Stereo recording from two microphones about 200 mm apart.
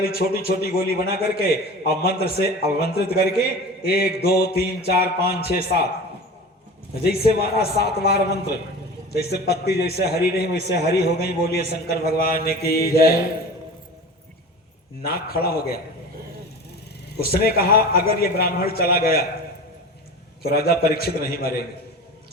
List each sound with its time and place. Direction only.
0.0 s a man's voice: 50° left (ahead or behind)
7.0 s a man's voice: 50° left (ahead or behind)
15.0 s a man's voice: 50° left (ahead or behind)
17.2 s a man's voice: 50° left (ahead or behind)
20.4 s a man's voice: 50° left (ahead or behind)